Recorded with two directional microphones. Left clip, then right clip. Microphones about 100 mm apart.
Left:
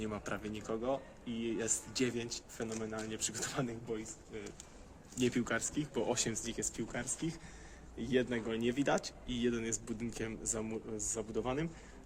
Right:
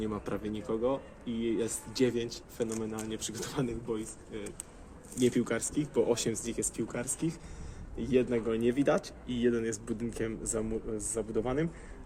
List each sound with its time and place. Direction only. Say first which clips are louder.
0.0 s speech: right 5 dB; 35° left (ahead or behind)
5.3 s speech: right 4 dB; 40° left (ahead or behind)